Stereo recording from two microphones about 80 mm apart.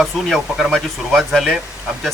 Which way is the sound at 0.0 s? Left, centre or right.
Centre.